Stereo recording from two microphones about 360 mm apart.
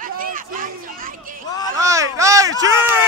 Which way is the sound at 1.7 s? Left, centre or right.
Centre.